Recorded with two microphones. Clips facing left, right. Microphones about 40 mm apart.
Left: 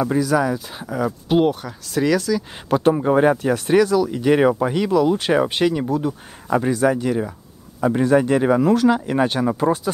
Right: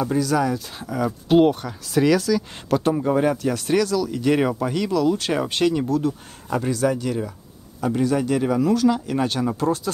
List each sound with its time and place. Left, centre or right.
0.0 s speech: centre
2.7 s speech: centre